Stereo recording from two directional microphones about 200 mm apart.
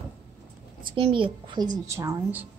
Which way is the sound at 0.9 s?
25° right (ahead or behind).